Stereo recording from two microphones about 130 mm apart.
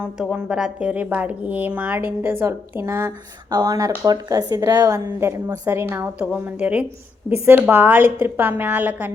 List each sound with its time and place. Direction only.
0.2 s a woman's voice: 5° right (ahead or behind)